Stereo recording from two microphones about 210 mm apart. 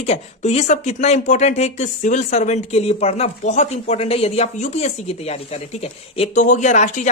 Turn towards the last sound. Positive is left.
turn(degrees=35)  # may be behind; listen again after turning